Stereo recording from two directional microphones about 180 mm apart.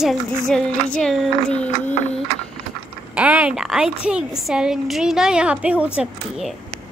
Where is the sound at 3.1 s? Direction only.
5° right (ahead or behind).